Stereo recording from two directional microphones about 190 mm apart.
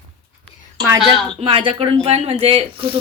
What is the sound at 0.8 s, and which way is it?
A woman's voice, 25° right (ahead or behind).